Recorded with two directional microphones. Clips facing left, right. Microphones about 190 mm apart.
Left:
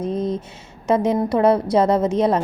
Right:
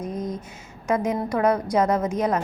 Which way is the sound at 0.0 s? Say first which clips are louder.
Left 7 dB; 30° left (ahead or behind).